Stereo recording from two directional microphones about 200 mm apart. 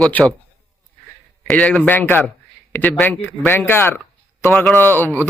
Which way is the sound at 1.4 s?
5° left (ahead or behind).